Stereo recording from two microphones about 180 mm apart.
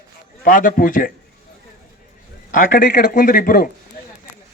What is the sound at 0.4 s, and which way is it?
Speech, 50° left (ahead or behind).